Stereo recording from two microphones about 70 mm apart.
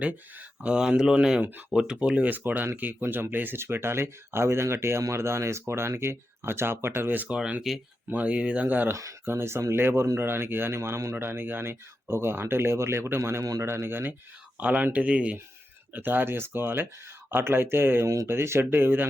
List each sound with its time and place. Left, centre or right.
0.0 s speech: centre
7.3 s speech: centre
8.1 s speech: centre
8.9 s speech: right
9.2 s speech: right; by 15.4 s centre
15.9 s speech: right